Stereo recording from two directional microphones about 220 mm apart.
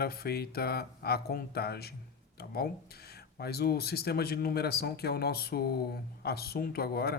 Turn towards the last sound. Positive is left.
turn(degrees=45)  # may be behind; listen again after turning